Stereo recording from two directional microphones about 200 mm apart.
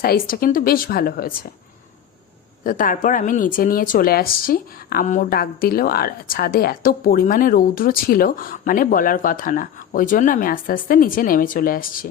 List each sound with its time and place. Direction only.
0.0 s speech: 50° left (ahead or behind)
2.6 s speech: 45° left (ahead or behind)